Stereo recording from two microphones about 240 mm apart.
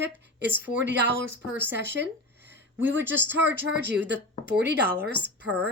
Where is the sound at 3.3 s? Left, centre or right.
Right.